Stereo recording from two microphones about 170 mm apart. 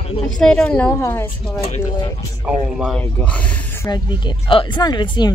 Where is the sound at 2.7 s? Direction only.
5° left (ahead or behind).